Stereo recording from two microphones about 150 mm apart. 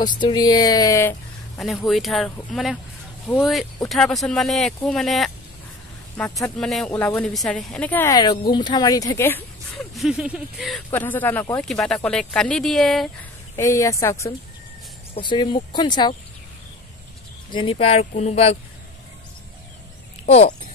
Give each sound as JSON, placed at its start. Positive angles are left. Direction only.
{"t": 0.1, "sound": "speech", "side_deg": 30}
{"t": 1.9, "sound": "speech", "side_deg": 0}
{"t": 6.4, "sound": "speech", "side_deg": 5}
{"t": 8.1, "sound": "speech", "side_deg": 30}
{"t": 9.9, "sound": "speech", "side_deg": -5}
{"t": 10.9, "sound": "speech", "side_deg": 10}
{"t": 11.6, "sound": "speech", "side_deg": 5}
{"t": 13.6, "sound": "speech", "side_deg": 20}
{"t": 15.1, "sound": "speech", "side_deg": 30}
{"t": 17.5, "sound": "speech", "side_deg": 35}
{"t": 20.2, "sound": "speech", "side_deg": 45}